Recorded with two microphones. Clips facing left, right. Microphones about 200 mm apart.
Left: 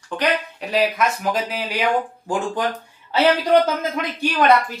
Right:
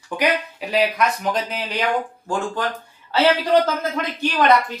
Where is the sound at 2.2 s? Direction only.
15° left (ahead or behind).